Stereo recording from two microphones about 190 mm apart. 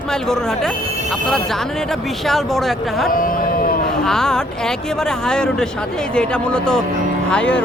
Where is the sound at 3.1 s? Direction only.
50° left (ahead or behind).